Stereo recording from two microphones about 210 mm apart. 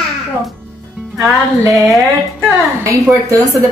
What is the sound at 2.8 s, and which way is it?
Speech, 15° right (ahead or behind).